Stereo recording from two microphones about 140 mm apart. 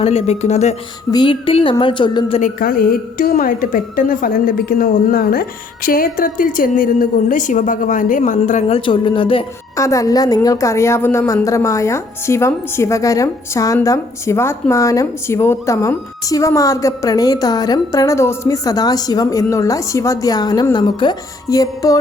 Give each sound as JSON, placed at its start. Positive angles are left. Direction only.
{"t": 0.0, "sound": "speech", "side_deg": 50}
{"t": 1.1, "sound": "speech", "side_deg": 35}
{"t": 2.4, "sound": "a woman's voice", "side_deg": 90}
{"t": 8.6, "sound": "speech", "side_deg": 40}
{"t": 9.7, "sound": "speech", "side_deg": 20}